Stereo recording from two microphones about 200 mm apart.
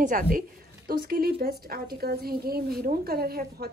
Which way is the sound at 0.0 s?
45° right (ahead or behind).